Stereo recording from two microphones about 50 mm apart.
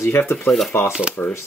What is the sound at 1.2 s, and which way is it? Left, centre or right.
Speech, left.